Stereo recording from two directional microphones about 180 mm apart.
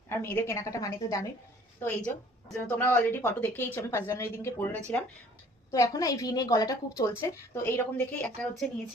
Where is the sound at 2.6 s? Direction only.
10° left (ahead or behind).